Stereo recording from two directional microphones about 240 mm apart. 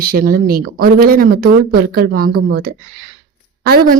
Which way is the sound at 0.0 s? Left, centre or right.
Right.